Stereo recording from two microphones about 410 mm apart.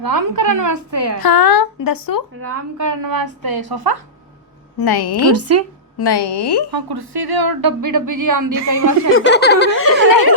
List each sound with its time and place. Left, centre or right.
0.0 s speech: right
1.2 s speech: left
2.4 s speech: right
4.8 s speech: left
5.3 s speech: right
6.0 s a woman's voice: left
6.7 s speech: right
9.1 s a sound: left